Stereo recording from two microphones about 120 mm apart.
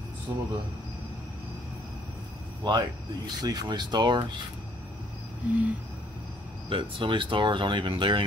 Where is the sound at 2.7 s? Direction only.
35° right (ahead or behind).